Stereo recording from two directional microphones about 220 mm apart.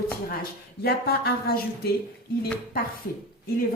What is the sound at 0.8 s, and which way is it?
Speech, 45° left (ahead or behind).